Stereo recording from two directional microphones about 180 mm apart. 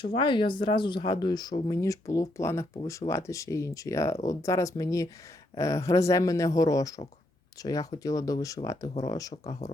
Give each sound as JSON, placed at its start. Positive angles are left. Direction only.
{"t": 0.0, "sound": "speech", "side_deg": 25}